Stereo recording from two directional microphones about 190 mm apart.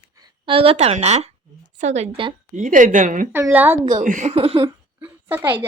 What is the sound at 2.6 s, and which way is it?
Speech, 45° right (ahead or behind).